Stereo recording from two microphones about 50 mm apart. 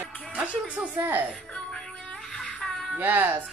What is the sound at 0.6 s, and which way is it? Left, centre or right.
Speech, right.